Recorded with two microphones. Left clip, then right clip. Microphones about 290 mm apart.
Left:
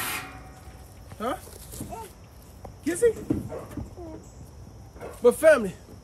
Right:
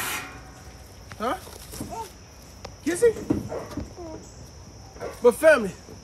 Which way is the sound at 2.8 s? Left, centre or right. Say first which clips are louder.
Right 2 dB; centre.